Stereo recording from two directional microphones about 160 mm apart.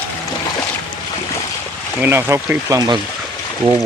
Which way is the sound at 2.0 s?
15° right (ahead or behind).